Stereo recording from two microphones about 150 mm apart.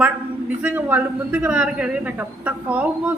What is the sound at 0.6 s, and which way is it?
A man's voice, 10° right (ahead or behind).